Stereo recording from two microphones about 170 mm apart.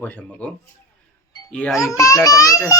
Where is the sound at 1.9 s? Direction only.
20° left (ahead or behind).